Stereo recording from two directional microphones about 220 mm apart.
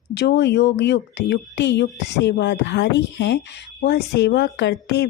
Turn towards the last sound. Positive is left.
turn(degrees=50)  # may be behind; listen again after turning